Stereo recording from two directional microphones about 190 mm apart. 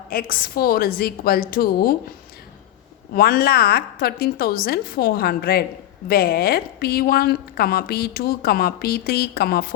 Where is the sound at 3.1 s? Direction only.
50° left (ahead or behind).